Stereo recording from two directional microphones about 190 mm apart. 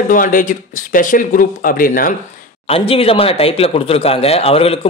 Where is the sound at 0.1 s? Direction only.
45° left (ahead or behind).